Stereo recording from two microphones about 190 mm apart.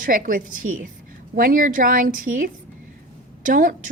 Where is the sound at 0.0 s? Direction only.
45° right (ahead or behind).